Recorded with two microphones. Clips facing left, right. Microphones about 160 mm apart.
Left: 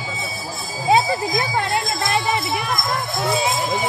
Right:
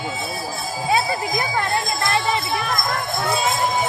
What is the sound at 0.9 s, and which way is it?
Jingle bell, 20° left (ahead or behind).